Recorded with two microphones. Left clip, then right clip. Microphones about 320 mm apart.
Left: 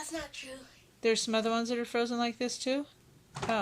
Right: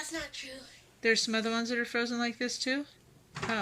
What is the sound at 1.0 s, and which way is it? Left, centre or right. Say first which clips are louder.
Speech: even; centre.